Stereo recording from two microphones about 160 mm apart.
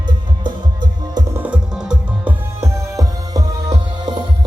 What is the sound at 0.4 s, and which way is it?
Music, 25° right (ahead or behind).